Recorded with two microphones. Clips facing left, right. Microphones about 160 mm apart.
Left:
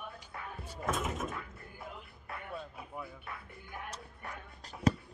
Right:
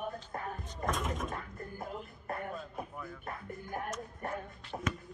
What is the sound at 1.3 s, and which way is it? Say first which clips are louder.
Music: right 3 dB; 45° right (ahead or behind).